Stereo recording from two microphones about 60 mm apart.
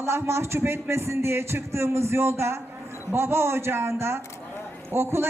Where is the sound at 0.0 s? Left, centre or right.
Right.